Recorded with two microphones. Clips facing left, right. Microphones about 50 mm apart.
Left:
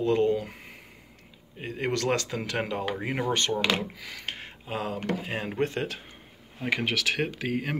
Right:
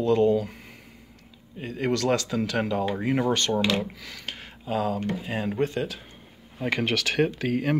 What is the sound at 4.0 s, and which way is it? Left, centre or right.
Speech, centre.